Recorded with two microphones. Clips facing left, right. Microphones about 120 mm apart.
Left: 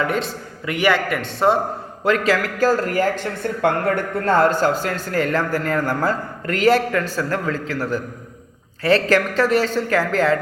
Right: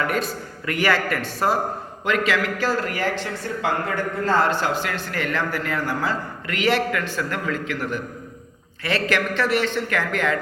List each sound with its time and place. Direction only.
0.0 s a man's voice: 25° left (ahead or behind)
2.0 s speech: 35° left (ahead or behind)